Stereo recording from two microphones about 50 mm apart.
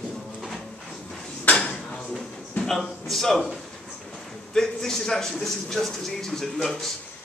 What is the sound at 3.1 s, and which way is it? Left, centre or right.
Speech, centre.